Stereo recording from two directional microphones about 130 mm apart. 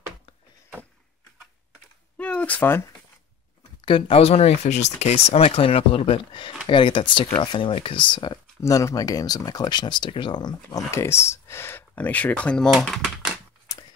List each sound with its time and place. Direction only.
2.1 s a sound: 10° left (ahead or behind)
3.8 s speech: 45° left (ahead or behind)
8.5 s speech: 25° left (ahead or behind)
10.9 s speech: 20° left (ahead or behind); by 13.3 s centre (ahead or behind)